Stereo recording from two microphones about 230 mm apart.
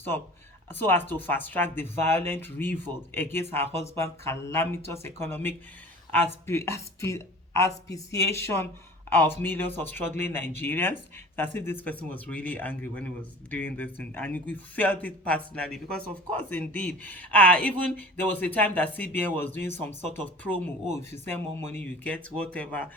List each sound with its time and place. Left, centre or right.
0.7 s a man's voice: centre
19.7 s speech: right
20.1 s a man's voice: centre